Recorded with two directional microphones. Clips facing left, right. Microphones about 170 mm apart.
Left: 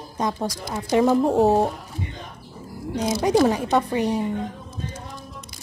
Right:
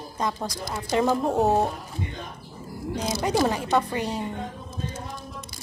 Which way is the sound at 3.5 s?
15° left (ahead or behind).